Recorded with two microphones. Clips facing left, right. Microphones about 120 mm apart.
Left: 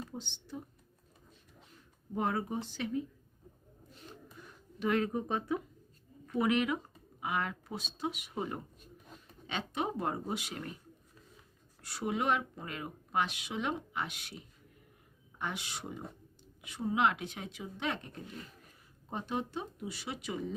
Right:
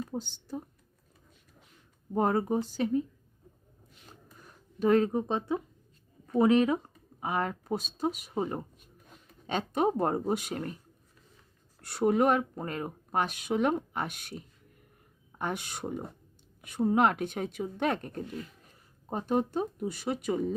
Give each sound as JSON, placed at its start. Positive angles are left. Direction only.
{"t": 0.1, "sound": "speech", "side_deg": -45}
{"t": 2.1, "sound": "speech", "side_deg": -40}
{"t": 4.4, "sound": "speech", "side_deg": -35}
{"t": 11.8, "sound": "speech", "side_deg": -55}